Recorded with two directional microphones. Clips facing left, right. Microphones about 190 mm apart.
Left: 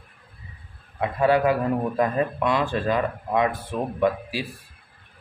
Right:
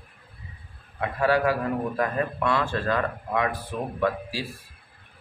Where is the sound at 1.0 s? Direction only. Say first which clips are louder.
Left 3 dB; 20° left (ahead or behind).